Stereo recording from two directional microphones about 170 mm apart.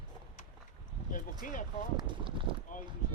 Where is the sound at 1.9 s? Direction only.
30° right (ahead or behind).